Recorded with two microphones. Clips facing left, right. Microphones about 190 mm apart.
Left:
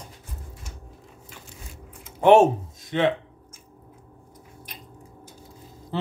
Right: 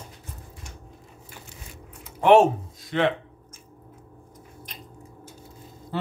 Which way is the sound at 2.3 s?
20° left (ahead or behind).